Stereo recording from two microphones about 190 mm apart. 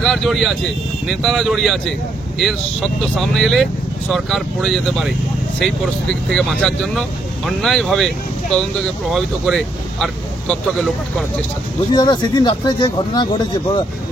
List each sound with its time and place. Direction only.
0.0 s speech: centre (ahead or behind)
11.9 s speech: 25° left (ahead or behind)